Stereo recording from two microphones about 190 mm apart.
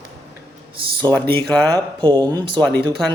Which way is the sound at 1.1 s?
15° left (ahead or behind).